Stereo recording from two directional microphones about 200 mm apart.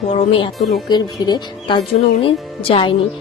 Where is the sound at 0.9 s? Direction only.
20° left (ahead or behind).